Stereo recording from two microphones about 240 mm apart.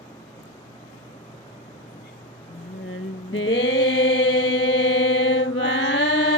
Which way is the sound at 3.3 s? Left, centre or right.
Left.